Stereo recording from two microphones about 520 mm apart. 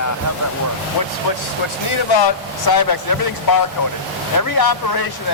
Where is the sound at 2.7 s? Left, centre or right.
Left.